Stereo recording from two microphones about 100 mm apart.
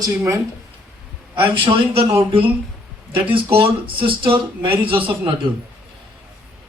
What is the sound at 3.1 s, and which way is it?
Speech, 60° right (ahead or behind).